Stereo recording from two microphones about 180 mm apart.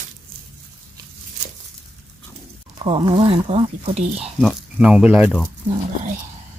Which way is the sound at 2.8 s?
30° right (ahead or behind).